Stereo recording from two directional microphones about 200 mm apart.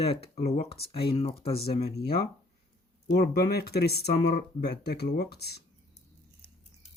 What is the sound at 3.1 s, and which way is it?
Speech, 55° left (ahead or behind).